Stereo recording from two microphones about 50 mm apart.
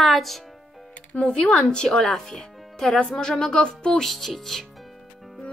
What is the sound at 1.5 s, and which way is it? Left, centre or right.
Speech, centre.